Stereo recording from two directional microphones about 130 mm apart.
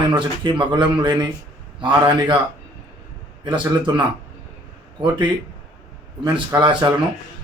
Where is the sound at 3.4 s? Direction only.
35° right (ahead or behind).